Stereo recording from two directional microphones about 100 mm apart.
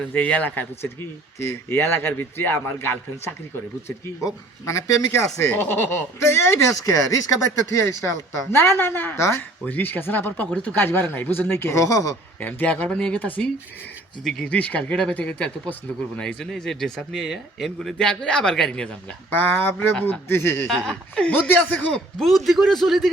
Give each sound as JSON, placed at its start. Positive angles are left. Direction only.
{"t": 0.1, "sound": "a woman's voice", "side_deg": 15}
{"t": 12.4, "sound": "speech", "side_deg": 15}
{"t": 14.5, "sound": "speech", "side_deg": 15}
{"t": 19.3, "sound": "a woman's voice", "side_deg": 20}
{"t": 20.7, "sound": "speech", "side_deg": 5}